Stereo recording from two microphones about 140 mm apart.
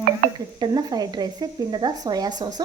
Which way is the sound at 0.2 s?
90° right.